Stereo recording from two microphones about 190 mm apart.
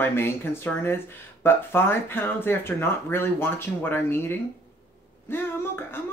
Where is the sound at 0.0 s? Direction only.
10° left (ahead or behind).